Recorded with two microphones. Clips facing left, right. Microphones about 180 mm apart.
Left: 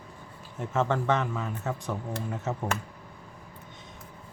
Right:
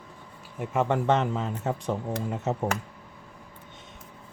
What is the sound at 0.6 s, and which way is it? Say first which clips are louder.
Speech: right 2 dB; 15° right (ahead or behind).